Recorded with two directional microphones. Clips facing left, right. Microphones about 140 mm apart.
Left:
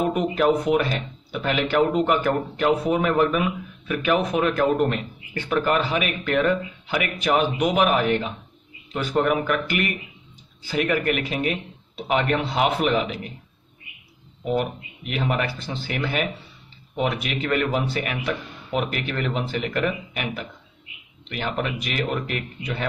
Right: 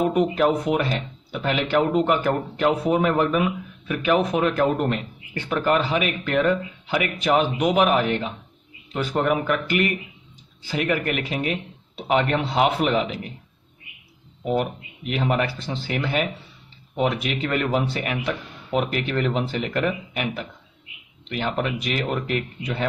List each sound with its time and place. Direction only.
0.1 s speech: 20° right (ahead or behind)
14.5 s speech: 25° right (ahead or behind)